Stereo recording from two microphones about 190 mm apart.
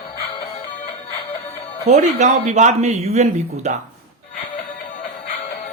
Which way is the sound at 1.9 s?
40° right (ahead or behind).